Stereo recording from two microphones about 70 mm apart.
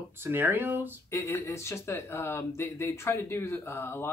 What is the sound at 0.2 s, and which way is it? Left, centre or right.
Speech, right.